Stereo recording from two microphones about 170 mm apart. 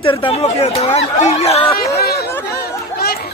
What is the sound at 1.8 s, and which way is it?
Chatter, 65° left (ahead or behind).